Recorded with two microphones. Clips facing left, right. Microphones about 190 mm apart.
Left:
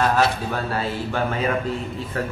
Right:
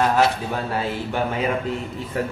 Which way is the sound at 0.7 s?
15° right (ahead or behind).